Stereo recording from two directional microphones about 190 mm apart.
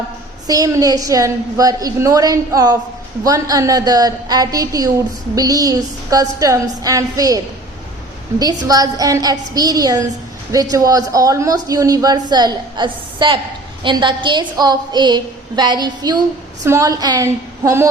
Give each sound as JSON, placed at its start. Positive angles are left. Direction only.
{"t": 0.4, "sound": "a man's voice", "side_deg": -20}